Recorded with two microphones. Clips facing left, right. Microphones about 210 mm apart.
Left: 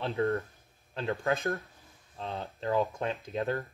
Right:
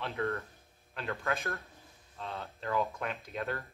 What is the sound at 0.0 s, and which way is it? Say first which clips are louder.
Speech: left 5 dB; 30° left (ahead or behind).